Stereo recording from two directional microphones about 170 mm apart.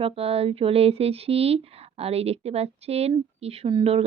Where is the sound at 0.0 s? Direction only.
35° right (ahead or behind).